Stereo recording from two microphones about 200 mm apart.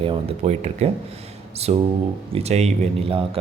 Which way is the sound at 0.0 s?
30° right (ahead or behind).